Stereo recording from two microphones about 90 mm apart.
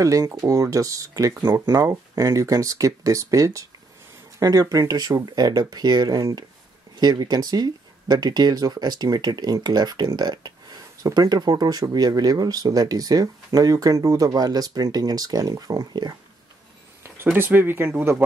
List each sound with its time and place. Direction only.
0.0 s speech: 40° right (ahead or behind)
1.4 s speech: 25° right (ahead or behind)
2.1 s speech: 35° right (ahead or behind)
17.0 s speech: 25° right (ahead or behind)